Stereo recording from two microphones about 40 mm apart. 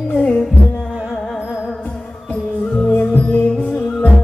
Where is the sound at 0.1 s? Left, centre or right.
Left.